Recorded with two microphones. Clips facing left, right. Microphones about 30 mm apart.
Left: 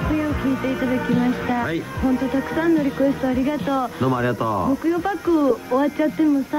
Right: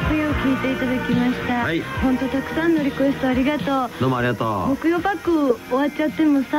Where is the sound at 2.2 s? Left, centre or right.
Centre.